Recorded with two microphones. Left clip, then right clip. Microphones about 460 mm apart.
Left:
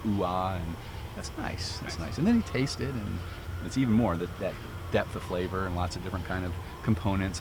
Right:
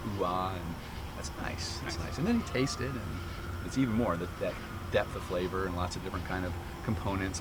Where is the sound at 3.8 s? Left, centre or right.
Left.